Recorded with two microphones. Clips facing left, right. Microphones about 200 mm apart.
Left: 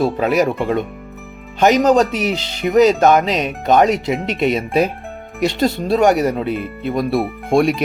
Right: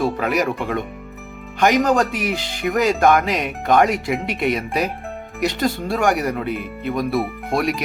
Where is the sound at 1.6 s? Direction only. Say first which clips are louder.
Left 4 dB; 20° left (ahead or behind).